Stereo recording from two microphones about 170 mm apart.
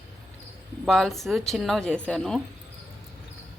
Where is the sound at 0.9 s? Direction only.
Centre (ahead or behind).